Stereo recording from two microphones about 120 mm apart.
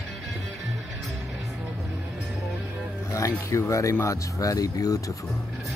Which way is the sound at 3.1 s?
25° left (ahead or behind).